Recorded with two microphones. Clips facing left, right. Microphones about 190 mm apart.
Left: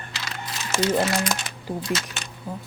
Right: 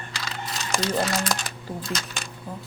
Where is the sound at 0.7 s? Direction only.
5° left (ahead or behind).